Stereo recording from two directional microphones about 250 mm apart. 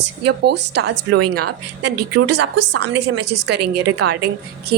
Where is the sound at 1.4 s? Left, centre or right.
Right.